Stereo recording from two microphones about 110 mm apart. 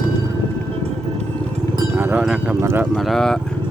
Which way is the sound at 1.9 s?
20° right (ahead or behind).